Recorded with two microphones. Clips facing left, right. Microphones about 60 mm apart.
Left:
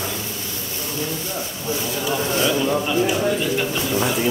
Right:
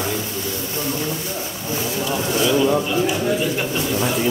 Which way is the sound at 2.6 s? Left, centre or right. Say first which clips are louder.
Right 2 dB; centre.